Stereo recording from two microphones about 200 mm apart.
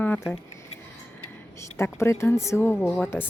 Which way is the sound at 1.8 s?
15° left (ahead or behind).